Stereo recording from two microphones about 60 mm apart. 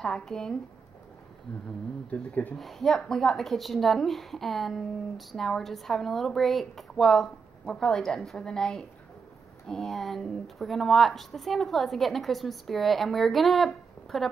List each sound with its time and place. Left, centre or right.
0.0 s speech: centre
2.0 s speech: left
2.5 s a woman's voice: centre